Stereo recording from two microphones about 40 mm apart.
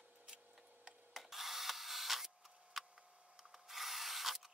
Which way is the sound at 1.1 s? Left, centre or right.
Centre.